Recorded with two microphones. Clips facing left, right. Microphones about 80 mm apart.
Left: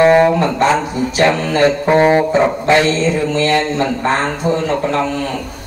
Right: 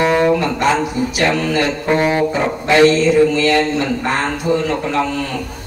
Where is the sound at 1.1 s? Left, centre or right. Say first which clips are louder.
Left 4 dB; left.